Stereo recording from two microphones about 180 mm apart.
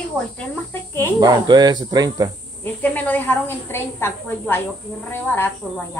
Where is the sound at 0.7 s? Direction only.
15° left (ahead or behind).